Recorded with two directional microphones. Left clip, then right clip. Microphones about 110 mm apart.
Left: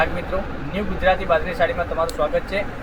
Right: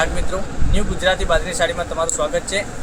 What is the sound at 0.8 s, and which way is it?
Speech, 15° right (ahead or behind).